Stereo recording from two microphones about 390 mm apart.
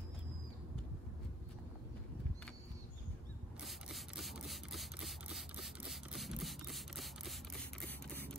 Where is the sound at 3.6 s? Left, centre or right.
Centre.